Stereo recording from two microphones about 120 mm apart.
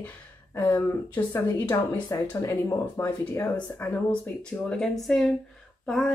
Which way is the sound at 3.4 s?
10° left (ahead or behind).